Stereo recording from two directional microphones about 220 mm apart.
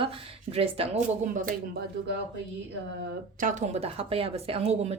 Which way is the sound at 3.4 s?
30° right (ahead or behind).